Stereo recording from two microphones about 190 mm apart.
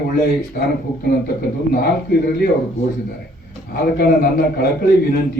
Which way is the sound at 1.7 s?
55° left (ahead or behind).